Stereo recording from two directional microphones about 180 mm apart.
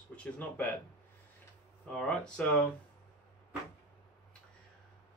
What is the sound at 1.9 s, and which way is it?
Speech, 5° left (ahead or behind).